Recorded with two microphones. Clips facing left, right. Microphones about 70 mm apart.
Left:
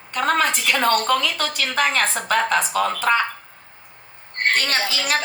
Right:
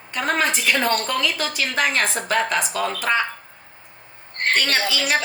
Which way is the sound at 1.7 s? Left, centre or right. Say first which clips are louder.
Left 2 dB; left.